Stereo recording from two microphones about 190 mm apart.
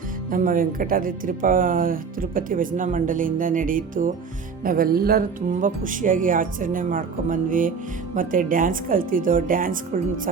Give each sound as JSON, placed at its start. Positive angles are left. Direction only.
{"t": 0.3, "sound": "speech", "side_deg": -45}